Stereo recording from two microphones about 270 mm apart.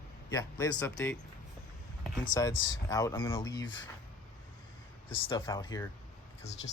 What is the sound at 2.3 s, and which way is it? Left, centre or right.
Speech, centre.